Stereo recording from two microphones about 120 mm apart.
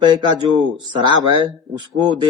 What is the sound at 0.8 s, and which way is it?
A man's voice, 40° right (ahead or behind).